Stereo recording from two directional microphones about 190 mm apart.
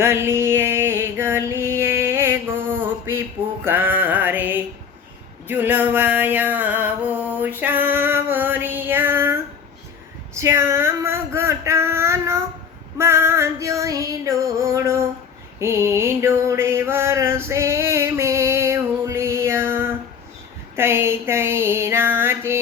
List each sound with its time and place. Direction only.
0.0 s a sound: 15° right (ahead or behind)
3.6 s music: 10° right (ahead or behind)
5.5 s a sound: 10° right (ahead or behind)
13.0 s female singing: 15° right (ahead or behind)
15.5 s mantra: 15° right (ahead or behind)
20.7 s female singing: 15° right (ahead or behind)